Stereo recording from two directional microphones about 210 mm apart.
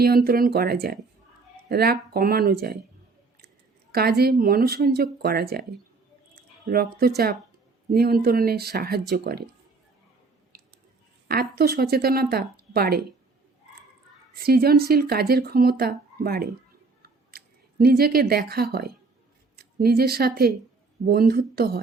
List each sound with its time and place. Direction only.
0.0 s speech: 45° right (ahead or behind)
3.9 s speech: 50° right (ahead or behind)
6.3 s a sound: 45° right (ahead or behind)
7.9 s speech: 45° right (ahead or behind)
10.5 s squish: 45° right (ahead or behind)
11.3 s speech: 45° right (ahead or behind)
14.3 s speech: 45° right (ahead or behind)
17.0 s scissors: 45° right (ahead or behind)
19.5 s speech: 45° right (ahead or behind)